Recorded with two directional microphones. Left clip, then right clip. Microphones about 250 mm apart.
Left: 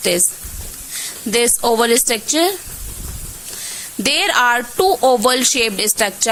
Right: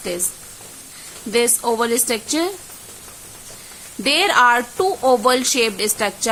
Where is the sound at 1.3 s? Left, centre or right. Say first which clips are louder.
Left 3 dB; centre.